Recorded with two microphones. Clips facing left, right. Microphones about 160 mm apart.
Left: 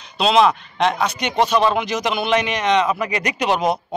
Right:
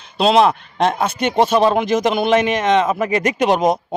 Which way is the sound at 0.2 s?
45° right (ahead or behind).